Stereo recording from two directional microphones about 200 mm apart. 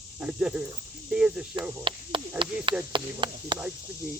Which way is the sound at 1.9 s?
25° right (ahead or behind).